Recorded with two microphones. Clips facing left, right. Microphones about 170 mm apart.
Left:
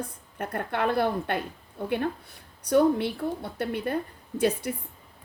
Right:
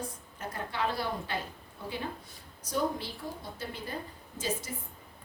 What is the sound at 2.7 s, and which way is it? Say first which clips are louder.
A woman's voice: left 11 dB; 65° left (ahead or behind).